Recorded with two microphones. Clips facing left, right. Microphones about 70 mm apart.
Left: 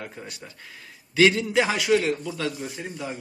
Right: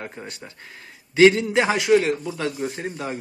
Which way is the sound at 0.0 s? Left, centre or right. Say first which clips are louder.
Right 3 dB; right.